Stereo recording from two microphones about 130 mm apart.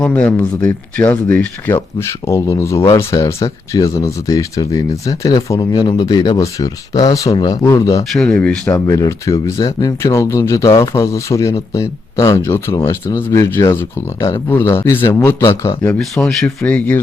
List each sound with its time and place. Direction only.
0.0 s speech: 10° left (ahead or behind)
8.1 s speech: 5° left (ahead or behind)
8.7 s speech: 25° left (ahead or behind)
15.9 s speech: 5° left (ahead or behind)